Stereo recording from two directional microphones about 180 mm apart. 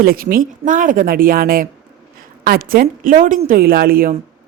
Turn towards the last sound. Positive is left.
turn(degrees=-55)  # may be behind; listen again after turning